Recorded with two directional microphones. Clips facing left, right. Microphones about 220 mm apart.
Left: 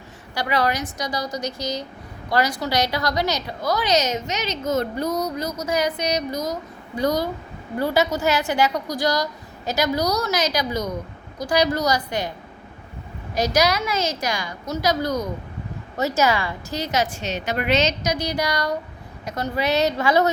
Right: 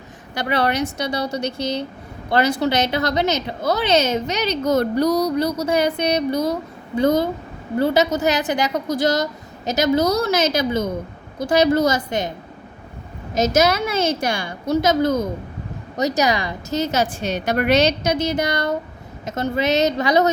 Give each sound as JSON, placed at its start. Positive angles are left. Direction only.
{"t": 0.4, "sound": "a woman's voice", "side_deg": -30}
{"t": 4.9, "sound": "a sound", "side_deg": -75}
{"t": 5.5, "sound": "a woman's voice", "side_deg": -30}
{"t": 13.6, "sound": "a woman's voice", "side_deg": -25}
{"t": 13.8, "sound": "a woman's voice", "side_deg": -55}
{"t": 14.3, "sound": "a woman's voice", "side_deg": -30}
{"t": 17.1, "sound": "a woman's voice", "side_deg": -55}
{"t": 18.0, "sound": "a woman's voice", "side_deg": -25}